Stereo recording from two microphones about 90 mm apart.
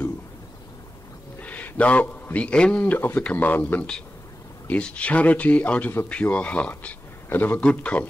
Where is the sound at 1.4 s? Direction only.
15° left (ahead or behind).